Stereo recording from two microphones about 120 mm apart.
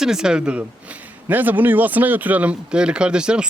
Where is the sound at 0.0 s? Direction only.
5° right (ahead or behind).